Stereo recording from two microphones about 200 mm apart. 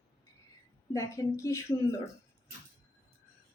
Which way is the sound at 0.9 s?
15° left (ahead or behind).